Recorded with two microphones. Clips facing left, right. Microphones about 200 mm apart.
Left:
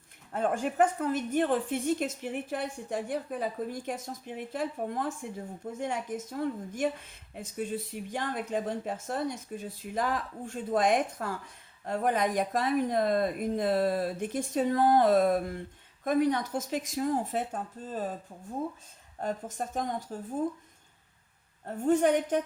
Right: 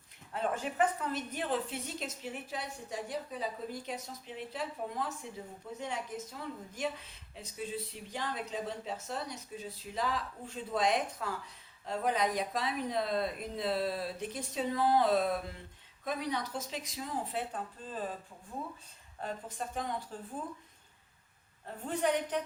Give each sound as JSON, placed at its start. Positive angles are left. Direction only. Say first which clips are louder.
{"t": 0.3, "sound": "speech", "louder": "left 6 dB", "side_deg": 50}
{"t": 19.2, "sound": "speech", "louder": "left 6 dB", "side_deg": 45}
{"t": 21.8, "sound": "speech", "louder": "left 8 dB", "side_deg": 45}